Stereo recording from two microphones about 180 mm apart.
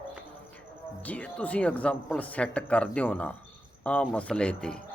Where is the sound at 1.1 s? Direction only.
10° left (ahead or behind).